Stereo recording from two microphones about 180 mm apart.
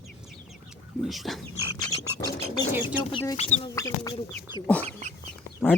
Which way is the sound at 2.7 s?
10° right (ahead or behind).